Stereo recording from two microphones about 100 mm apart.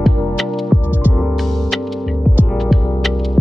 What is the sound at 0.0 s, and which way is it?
Music, centre (ahead or behind).